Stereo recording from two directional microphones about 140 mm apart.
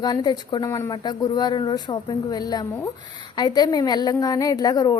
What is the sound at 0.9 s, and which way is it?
A woman's voice, 30° left (ahead or behind).